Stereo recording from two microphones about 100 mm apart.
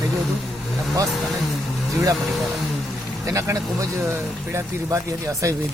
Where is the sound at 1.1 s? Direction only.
Centre (ahead or behind).